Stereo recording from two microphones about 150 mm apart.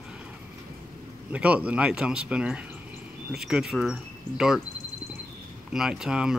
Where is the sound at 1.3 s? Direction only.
10° right (ahead or behind).